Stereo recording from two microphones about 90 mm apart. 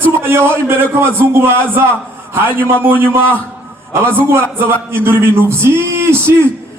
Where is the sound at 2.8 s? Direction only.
20° right (ahead or behind).